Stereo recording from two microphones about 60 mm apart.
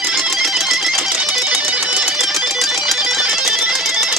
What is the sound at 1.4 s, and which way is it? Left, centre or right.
Music, centre.